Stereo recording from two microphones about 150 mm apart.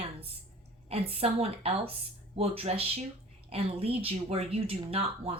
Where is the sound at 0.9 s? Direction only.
40° right (ahead or behind).